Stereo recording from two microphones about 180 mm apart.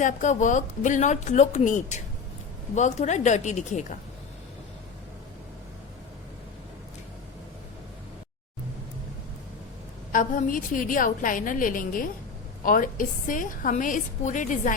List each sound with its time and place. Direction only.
0.0 s a woman's voice: 45° left (ahead or behind)
10.1 s a woman's voice: 50° left (ahead or behind)